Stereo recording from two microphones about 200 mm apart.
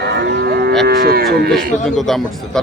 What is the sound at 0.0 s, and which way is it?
Cattle, 60° right (ahead or behind).